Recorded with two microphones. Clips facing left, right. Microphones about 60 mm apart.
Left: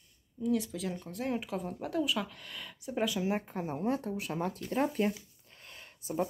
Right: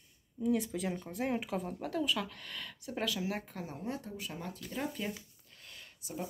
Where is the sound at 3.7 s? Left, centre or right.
Left.